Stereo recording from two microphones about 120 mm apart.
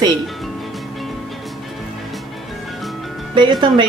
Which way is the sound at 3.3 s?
40° right (ahead or behind).